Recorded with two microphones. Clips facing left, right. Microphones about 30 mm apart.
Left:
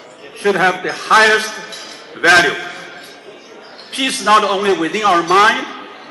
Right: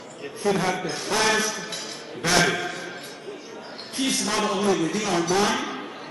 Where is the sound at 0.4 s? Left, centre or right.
Left.